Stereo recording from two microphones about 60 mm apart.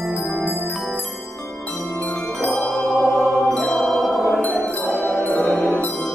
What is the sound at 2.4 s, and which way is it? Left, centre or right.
Mantra, centre.